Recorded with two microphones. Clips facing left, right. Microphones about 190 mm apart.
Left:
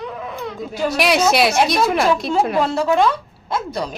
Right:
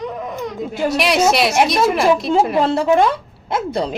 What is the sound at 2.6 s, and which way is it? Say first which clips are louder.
A woman's voice: right 2 dB; 25° right (ahead or behind).